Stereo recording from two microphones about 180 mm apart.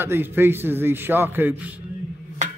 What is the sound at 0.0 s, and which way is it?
A man's voice, 10° right (ahead or behind).